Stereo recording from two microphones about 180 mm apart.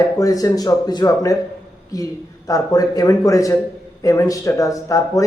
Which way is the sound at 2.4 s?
20° left (ahead or behind).